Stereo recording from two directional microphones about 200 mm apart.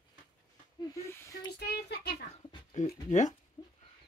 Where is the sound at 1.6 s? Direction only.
55° left (ahead or behind).